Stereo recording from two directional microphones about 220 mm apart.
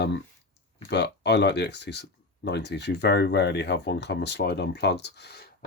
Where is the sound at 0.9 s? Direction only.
50° left (ahead or behind).